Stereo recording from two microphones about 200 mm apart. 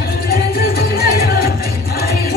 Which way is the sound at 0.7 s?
50° left (ahead or behind).